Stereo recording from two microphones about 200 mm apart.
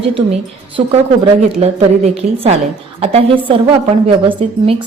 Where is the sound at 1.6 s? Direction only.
30° right (ahead or behind).